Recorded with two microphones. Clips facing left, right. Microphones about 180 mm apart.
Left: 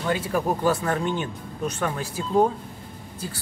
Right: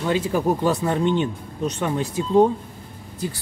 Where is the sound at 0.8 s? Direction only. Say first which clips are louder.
Right 5 dB; 25° right (ahead or behind).